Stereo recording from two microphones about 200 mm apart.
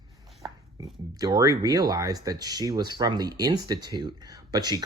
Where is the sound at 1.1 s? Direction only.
20° right (ahead or behind).